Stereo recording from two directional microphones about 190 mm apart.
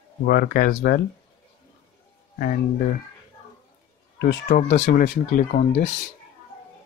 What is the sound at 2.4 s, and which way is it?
Speech, 50° left (ahead or behind).